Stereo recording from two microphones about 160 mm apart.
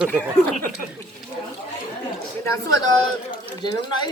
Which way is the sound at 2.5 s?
25° left (ahead or behind).